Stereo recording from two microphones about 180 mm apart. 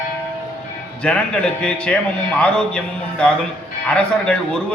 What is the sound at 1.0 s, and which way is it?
A man's voice, 5° left (ahead or behind).